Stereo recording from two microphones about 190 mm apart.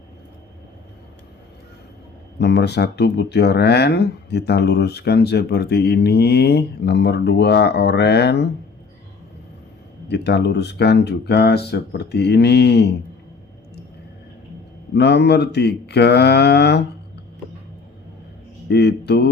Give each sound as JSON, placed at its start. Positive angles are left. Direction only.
{"t": 2.4, "sound": "speech", "side_deg": 60}
{"t": 10.1, "sound": "speech", "side_deg": 60}
{"t": 14.9, "sound": "speech", "side_deg": 60}
{"t": 18.7, "sound": "speech", "side_deg": 60}